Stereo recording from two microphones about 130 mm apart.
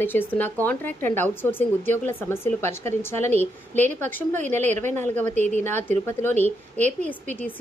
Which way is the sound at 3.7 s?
60° right (ahead or behind).